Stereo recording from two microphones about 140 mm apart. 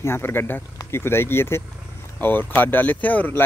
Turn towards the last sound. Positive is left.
turn(degrees=10)  # may be behind; listen again after turning